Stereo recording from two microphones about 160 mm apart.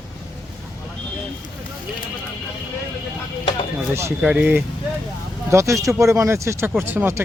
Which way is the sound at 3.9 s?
15° right (ahead or behind).